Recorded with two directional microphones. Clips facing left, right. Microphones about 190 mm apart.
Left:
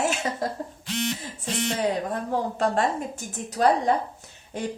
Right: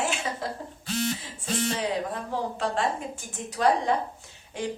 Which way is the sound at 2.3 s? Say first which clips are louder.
Left 5 dB; 45° left (ahead or behind).